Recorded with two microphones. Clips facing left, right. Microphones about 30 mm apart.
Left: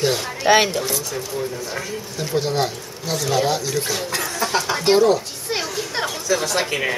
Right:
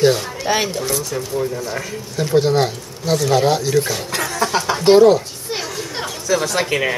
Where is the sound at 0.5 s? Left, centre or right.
Left.